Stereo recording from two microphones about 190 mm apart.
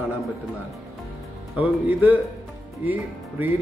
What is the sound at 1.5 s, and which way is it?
Speech, 10° right (ahead or behind).